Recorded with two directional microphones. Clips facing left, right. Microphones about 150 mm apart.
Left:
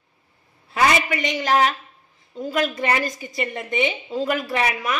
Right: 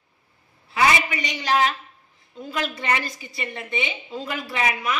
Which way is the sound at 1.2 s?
45° left (ahead or behind).